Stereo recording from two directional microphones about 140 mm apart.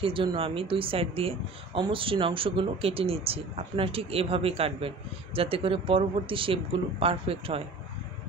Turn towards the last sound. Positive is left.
turn(degrees=-45)  # may be behind; listen again after turning